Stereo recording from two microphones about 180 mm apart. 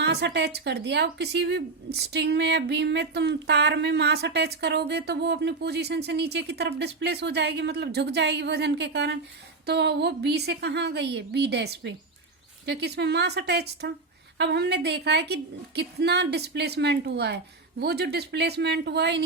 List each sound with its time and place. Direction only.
0.0 s speech: 70° right (ahead or behind)